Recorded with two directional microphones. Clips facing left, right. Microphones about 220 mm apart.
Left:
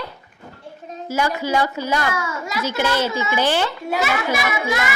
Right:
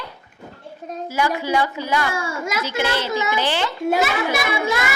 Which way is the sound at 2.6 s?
45° left (ahead or behind).